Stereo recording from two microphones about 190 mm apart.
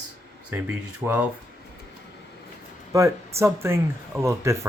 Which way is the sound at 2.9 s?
15° right (ahead or behind).